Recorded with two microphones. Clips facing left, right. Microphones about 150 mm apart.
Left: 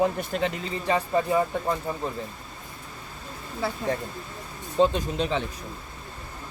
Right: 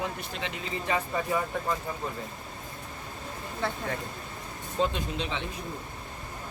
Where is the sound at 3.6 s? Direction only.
5° left (ahead or behind).